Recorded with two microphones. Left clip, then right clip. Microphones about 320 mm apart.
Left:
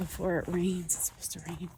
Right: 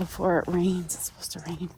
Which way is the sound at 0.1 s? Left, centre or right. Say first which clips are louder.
Right 7 dB; centre.